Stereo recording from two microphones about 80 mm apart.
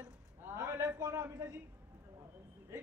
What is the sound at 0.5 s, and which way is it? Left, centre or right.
A man's voice, right.